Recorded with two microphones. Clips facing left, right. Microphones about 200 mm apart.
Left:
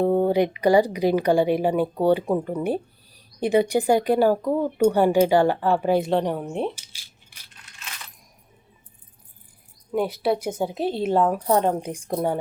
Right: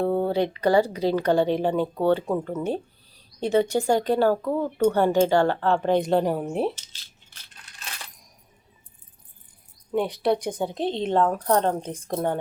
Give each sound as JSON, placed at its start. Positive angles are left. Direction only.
{"t": 0.0, "sound": "speech", "side_deg": 15}
{"t": 6.7, "sound": "coin", "side_deg": 10}
{"t": 7.8, "sound": "coin", "side_deg": -35}
{"t": 9.9, "sound": "speech", "side_deg": 5}